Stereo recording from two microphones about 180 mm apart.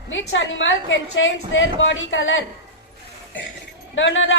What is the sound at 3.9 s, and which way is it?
Speech, 90° left.